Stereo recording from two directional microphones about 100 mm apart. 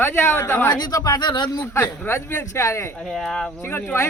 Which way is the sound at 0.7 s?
40° left (ahead or behind).